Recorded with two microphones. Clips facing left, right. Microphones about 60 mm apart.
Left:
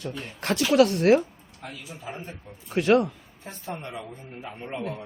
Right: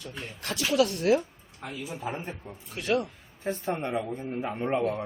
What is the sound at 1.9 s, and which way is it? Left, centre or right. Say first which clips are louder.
Speech: right 4 dB; right.